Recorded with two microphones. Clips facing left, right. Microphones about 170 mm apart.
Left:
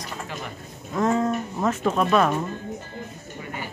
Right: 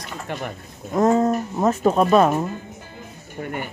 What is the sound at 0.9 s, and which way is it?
Speech, 35° right (ahead or behind).